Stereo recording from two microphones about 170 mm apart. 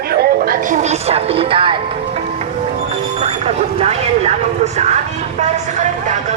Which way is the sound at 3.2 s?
35° right (ahead or behind).